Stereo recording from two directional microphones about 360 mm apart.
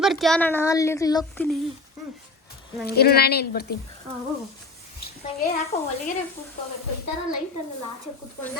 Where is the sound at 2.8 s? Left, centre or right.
Left.